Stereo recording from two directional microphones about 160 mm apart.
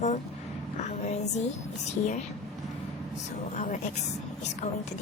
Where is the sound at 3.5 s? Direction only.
50° left (ahead or behind).